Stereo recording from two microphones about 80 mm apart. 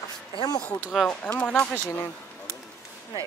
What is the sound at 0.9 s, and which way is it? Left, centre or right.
Speech, centre.